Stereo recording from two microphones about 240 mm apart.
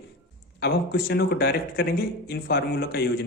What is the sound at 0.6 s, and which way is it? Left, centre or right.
A man's voice, left.